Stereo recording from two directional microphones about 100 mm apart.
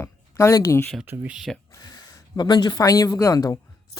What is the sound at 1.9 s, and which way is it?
A woman's voice, 45° left (ahead or behind).